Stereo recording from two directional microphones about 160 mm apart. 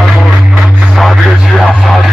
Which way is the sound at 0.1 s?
Centre (ahead or behind).